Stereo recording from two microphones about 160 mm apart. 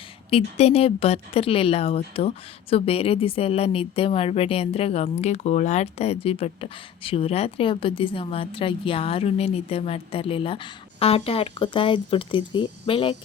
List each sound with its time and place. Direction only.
0.3 s a woman's voice: 40° left (ahead or behind)